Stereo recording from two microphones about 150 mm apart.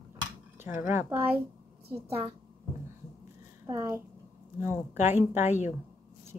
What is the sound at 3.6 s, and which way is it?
A woman's voice, 20° right (ahead or behind).